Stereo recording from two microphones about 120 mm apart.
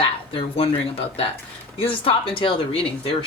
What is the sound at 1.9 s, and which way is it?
Speech, 50° left (ahead or behind).